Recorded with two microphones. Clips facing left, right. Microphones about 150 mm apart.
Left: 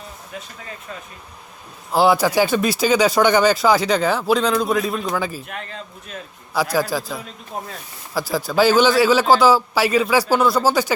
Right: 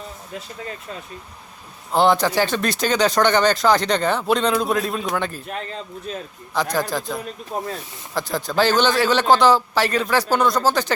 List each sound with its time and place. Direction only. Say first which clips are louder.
1.9 s speech: left 1 dB; 5° left (ahead or behind)
5.5 s speech: right 3 dB; 35° right (ahead or behind)
6.5 s speech: left 2 dB; 5° left (ahead or behind)
8.1 s speech: left 2 dB; 5° left (ahead or behind)